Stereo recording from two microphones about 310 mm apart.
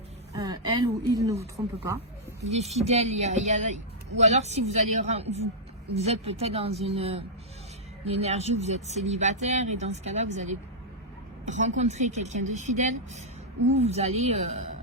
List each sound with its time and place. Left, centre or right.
0.3 s a woman's voice: centre
2.4 s speech: right